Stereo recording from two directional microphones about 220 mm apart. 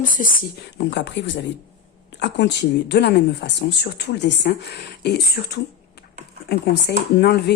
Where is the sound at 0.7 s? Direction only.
55° left (ahead or behind).